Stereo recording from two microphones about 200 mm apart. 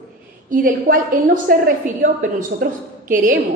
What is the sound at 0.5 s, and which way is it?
A woman's voice, 45° right (ahead or behind).